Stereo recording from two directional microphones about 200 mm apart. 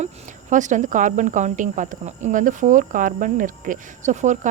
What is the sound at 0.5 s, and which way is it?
Speech, 40° right (ahead or behind).